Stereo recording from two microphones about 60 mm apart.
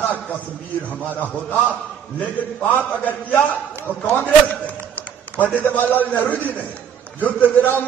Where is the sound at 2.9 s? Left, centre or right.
Left.